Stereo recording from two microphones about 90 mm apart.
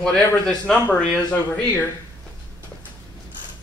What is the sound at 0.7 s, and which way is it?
Speech, 20° left (ahead or behind).